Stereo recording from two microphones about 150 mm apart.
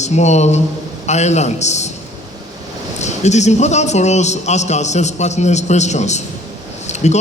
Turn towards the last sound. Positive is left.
turn(degrees=50)  # may be behind; listen again after turning